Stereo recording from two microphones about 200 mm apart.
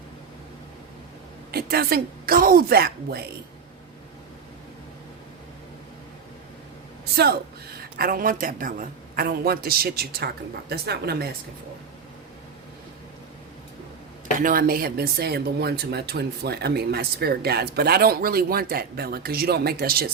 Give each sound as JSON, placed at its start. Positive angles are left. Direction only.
{"t": 1.5, "sound": "speech", "side_deg": -50}
{"t": 7.2, "sound": "speech", "side_deg": -50}
{"t": 14.3, "sound": "speech", "side_deg": -45}